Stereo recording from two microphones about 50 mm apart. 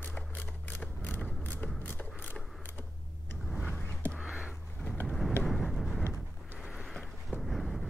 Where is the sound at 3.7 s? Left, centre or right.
Left.